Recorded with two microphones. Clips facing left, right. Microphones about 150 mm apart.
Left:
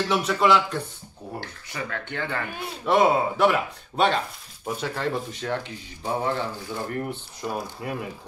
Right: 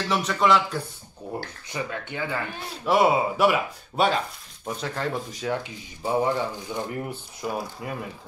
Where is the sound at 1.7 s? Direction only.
15° right (ahead or behind).